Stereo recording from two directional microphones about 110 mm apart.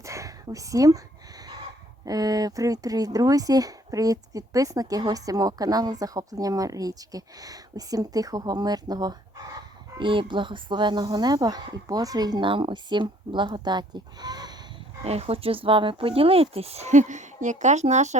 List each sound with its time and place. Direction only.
0.0 s a sound: 30° right (ahead or behind)
2.0 s speech: 35° right (ahead or behind)
9.6 s speech: 50° right (ahead or behind)
15.0 s speech: 70° right (ahead or behind); by 18.2 s 90° right